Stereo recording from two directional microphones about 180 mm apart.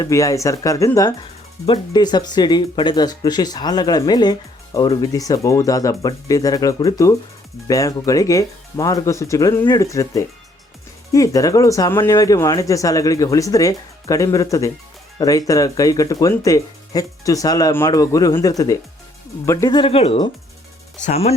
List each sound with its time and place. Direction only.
0.0 s speech: 20° left (ahead or behind)
19.7 s speech: 30° left (ahead or behind)